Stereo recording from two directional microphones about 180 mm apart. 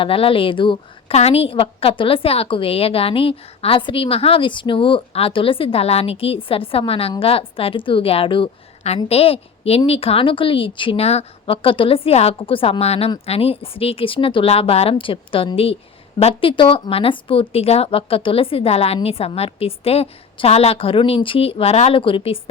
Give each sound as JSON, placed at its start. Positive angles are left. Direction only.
{"t": 0.0, "sound": "a woman's voice", "side_deg": 30}